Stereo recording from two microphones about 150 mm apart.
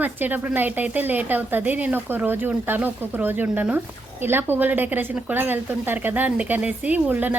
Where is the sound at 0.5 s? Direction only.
10° right (ahead or behind).